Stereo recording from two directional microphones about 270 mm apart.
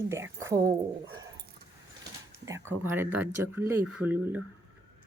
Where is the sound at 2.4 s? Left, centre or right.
Centre.